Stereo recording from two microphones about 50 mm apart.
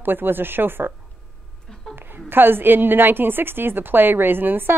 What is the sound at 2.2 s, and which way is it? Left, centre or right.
Speech, right.